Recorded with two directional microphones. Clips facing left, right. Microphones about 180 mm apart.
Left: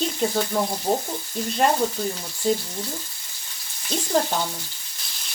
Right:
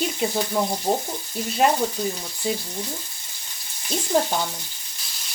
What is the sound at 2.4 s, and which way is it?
Speech, 5° right (ahead or behind).